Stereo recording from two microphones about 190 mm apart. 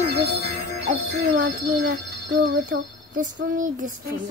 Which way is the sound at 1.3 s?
45° right (ahead or behind).